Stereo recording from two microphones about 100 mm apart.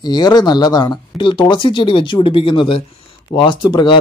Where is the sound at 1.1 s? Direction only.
55° left (ahead or behind).